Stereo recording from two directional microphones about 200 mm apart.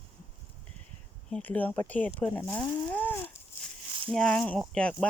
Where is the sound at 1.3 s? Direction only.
10° left (ahead or behind).